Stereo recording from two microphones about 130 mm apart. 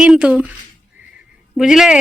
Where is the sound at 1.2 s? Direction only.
5° right (ahead or behind).